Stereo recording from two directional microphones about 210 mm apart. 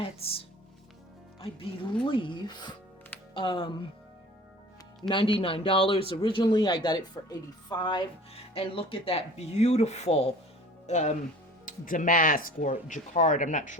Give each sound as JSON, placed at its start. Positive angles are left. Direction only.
{"t": 0.0, "sound": "speech", "side_deg": 25}
{"t": 5.0, "sound": "speech", "side_deg": 25}